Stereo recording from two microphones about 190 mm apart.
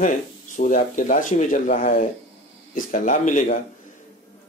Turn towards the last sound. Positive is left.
turn(degrees=45)  # may be behind; listen again after turning